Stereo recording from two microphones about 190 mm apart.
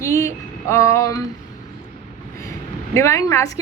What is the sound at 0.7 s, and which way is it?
Speech, 15° left (ahead or behind).